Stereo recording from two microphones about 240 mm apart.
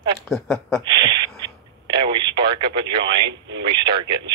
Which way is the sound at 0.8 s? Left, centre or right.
Centre.